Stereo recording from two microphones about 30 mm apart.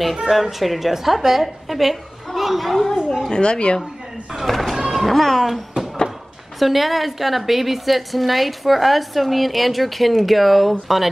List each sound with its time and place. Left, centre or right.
0.3 s a woman's voice: centre
2.3 s a sound: centre
2.7 s a woman's voice: centre
3.3 s speech: left
4.5 s a sound: centre
4.9 s speech: centre
6.6 s a woman's voice: centre